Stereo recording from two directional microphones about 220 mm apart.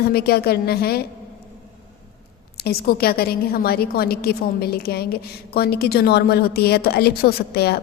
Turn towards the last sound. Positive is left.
turn(degrees=45)  # may be behind; listen again after turning